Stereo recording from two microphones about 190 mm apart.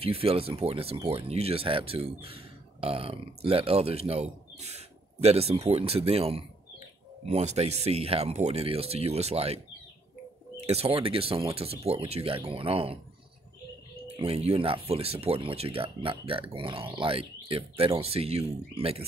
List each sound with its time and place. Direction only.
0.0 s speech: 30° right (ahead or behind)
10.6 s speech: 30° right (ahead or behind)
14.0 s speech: 30° right (ahead or behind)